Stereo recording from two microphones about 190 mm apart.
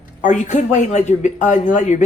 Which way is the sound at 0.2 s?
40° left (ahead or behind).